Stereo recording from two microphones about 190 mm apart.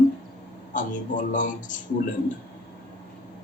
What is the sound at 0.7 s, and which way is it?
Speech, 45° left (ahead or behind).